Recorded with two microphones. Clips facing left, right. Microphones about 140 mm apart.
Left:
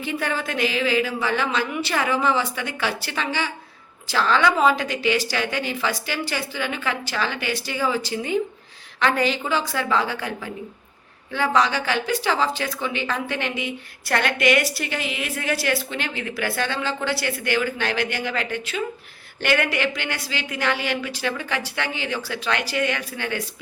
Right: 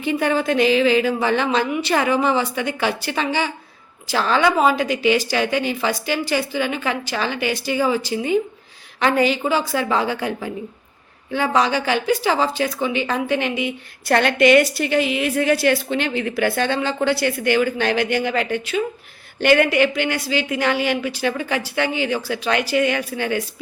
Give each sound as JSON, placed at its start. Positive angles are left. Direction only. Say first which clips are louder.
{"t": 0.0, "sound": "a woman's voice", "louder": "right 7 dB", "side_deg": -20}